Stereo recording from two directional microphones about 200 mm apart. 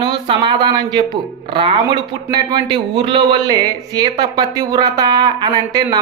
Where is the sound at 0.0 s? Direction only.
25° right (ahead or behind).